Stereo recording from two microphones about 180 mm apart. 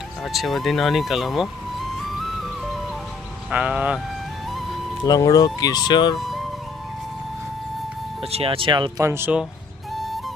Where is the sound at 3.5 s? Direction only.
5° right (ahead or behind).